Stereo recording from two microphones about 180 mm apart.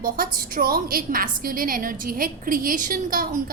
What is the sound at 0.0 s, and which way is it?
A woman's voice, 55° right (ahead or behind).